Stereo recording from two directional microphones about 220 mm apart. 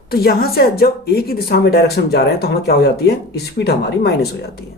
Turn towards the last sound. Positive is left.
turn(degrees=50)  # may be behind; listen again after turning